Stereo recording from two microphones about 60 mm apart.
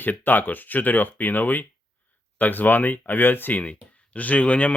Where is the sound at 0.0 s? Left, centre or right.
Left.